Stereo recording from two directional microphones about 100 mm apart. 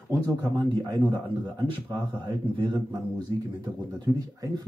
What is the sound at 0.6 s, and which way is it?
A man's voice, 50° right (ahead or behind).